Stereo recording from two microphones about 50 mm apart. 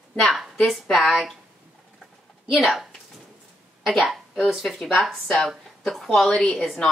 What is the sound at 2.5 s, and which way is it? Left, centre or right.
Speech, centre.